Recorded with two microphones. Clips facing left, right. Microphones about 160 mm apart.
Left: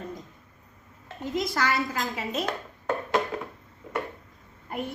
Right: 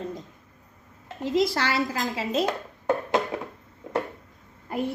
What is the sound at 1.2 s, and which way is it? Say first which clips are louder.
Speech: right 4 dB; 30° right (ahead or behind).